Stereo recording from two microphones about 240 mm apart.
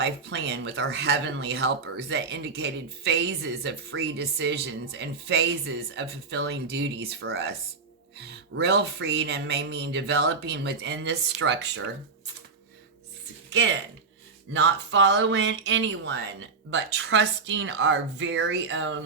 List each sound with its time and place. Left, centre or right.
0.0 s speech: right
14.5 s speech: right